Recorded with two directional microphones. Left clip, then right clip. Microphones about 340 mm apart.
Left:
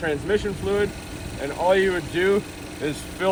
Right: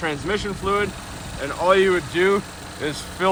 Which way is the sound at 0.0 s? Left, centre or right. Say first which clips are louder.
Left 1 dB; right.